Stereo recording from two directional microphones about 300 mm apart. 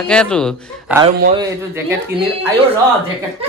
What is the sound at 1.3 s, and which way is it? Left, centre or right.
Speech, centre.